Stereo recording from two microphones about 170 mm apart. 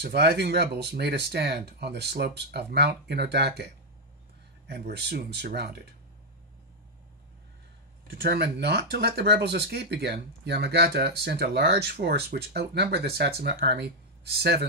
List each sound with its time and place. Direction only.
0.0 s speech: 70° right (ahead or behind)
8.1 s speech: 70° right (ahead or behind)